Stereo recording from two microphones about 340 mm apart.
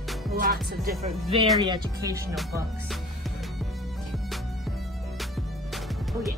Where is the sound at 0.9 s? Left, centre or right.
Right.